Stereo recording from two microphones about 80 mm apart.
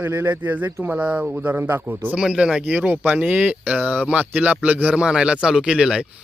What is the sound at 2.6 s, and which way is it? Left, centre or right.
Speech, right.